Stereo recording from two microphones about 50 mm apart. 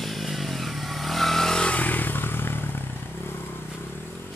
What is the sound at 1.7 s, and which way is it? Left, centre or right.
Vehicle, left.